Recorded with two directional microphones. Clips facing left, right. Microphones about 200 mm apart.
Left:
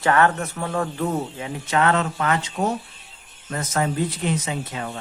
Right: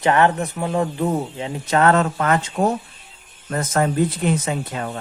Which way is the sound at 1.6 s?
40° right (ahead or behind).